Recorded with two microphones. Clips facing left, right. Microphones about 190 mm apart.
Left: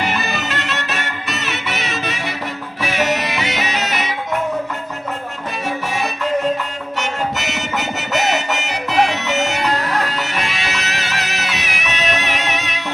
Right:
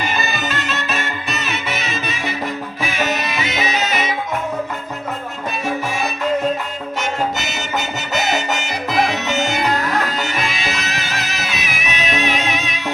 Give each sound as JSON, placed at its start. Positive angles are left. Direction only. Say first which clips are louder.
{"t": 0.0, "sound": "music", "louder": "left 1 dB", "side_deg": 70}
{"t": 7.0, "sound": "music", "louder": "right 1 dB", "side_deg": 70}